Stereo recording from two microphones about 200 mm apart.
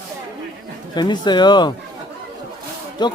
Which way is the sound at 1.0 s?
20° left (ahead or behind).